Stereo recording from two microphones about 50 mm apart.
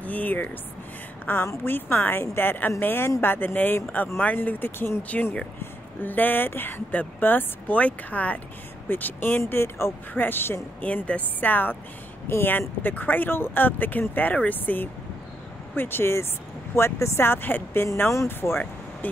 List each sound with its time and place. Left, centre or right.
0.0 s a sound: left
1.3 s a woman's voice: left
8.8 s speech: left
9.5 s speech: left
10.1 s a woman's voice: left
11.1 s speech: left
15.7 s a woman's voice: left
18.1 s speech: left